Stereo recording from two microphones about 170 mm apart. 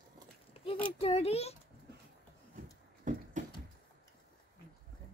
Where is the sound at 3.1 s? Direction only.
45° right (ahead or behind).